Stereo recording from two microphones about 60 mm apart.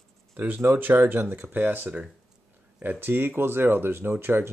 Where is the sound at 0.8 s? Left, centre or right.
Right.